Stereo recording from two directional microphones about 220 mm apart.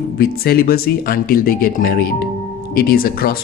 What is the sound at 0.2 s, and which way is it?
Music, 45° left (ahead or behind).